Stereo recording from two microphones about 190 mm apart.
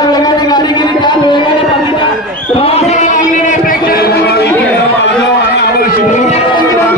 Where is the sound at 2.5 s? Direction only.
30° left (ahead or behind); by 5.9 s 60° left (ahead or behind).